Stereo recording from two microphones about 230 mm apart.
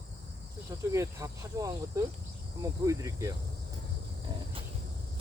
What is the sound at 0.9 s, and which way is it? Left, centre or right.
Speech, centre.